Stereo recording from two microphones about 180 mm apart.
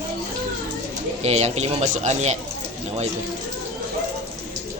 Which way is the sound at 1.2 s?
35° right (ahead or behind).